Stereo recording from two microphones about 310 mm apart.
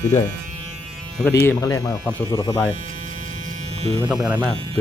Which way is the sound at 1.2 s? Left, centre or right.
Centre.